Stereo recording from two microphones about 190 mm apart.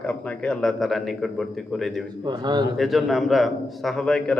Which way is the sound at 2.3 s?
25° right (ahead or behind).